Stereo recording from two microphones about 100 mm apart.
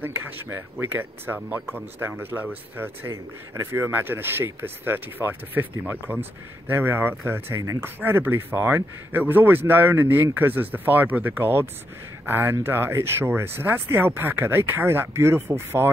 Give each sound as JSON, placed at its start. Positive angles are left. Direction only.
{"t": 0.0, "sound": "speech", "side_deg": -20}
{"t": 8.0, "sound": "speech", "side_deg": -20}